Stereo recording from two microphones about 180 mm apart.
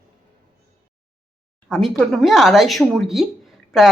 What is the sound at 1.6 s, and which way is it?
A woman's voice, centre (ahead or behind).